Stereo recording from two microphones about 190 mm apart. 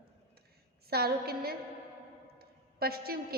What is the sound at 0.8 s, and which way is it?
Speech, 55° right (ahead or behind).